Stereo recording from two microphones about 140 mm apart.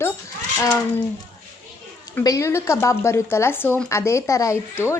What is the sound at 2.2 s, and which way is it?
A woman's voice, 25° left (ahead or behind).